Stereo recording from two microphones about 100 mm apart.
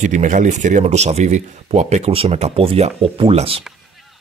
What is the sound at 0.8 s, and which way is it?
Speech, 90° right.